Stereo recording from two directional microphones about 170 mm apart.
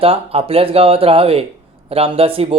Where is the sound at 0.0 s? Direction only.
35° right (ahead or behind).